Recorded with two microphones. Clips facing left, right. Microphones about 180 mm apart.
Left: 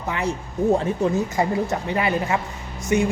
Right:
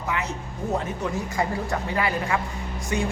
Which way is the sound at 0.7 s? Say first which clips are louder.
Left 6 dB; 30° left (ahead or behind).